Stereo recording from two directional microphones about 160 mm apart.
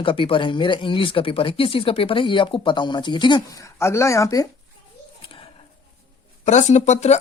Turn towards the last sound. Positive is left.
turn(degrees=45)  # may be behind; listen again after turning